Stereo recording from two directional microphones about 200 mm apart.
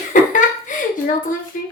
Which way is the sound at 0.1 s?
40° left (ahead or behind).